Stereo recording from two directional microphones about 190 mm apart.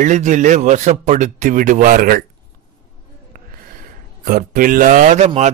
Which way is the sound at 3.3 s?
50° right (ahead or behind).